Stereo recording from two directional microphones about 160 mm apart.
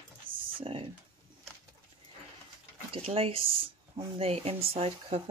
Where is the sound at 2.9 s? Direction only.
40° right (ahead or behind).